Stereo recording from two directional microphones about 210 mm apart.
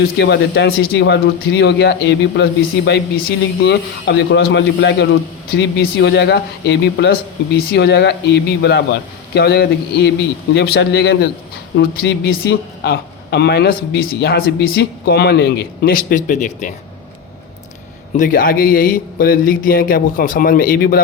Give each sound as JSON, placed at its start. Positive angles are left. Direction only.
{"t": 0.2, "sound": "a man's voice", "side_deg": 55}
{"t": 18.2, "sound": "a man's voice", "side_deg": 40}